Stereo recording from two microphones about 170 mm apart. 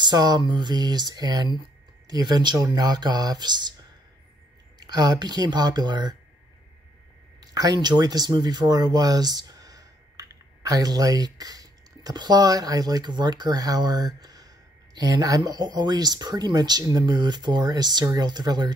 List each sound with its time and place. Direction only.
0.0 s speech: 25° right (ahead or behind)
7.3 s speech: 20° right (ahead or behind)